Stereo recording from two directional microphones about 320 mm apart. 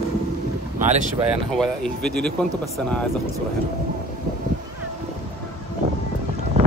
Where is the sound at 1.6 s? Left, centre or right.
Centre.